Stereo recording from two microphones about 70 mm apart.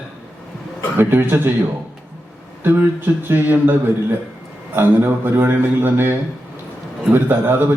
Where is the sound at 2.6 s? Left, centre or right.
Right.